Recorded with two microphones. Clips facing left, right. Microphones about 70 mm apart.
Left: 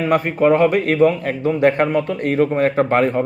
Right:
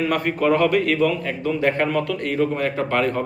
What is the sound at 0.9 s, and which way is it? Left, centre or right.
A man's voice, left.